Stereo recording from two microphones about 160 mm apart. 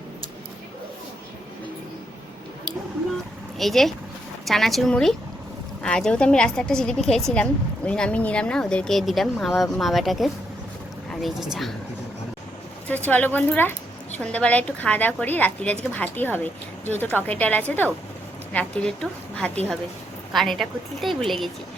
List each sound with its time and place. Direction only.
3.6 s a woman's voice: centre (ahead or behind)
12.9 s a woman's voice: 10° left (ahead or behind)